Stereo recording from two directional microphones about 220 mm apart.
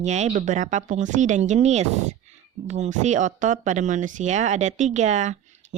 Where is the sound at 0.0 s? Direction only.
30° right (ahead or behind).